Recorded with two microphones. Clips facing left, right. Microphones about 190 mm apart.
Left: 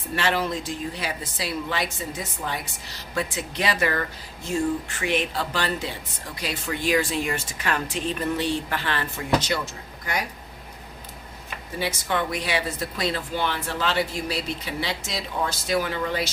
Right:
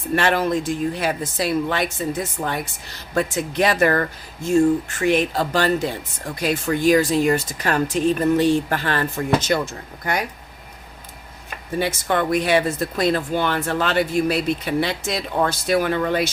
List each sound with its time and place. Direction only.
0.2 s speech: 55° right (ahead or behind)
11.8 s speech: 50° right (ahead or behind)